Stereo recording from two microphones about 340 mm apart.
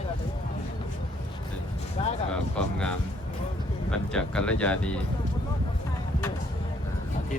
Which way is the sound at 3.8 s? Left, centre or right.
Centre.